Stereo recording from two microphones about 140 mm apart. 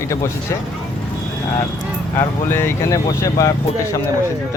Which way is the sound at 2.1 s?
15° left (ahead or behind).